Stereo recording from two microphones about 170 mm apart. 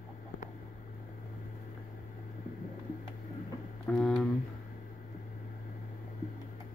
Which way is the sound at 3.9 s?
Centre (ahead or behind).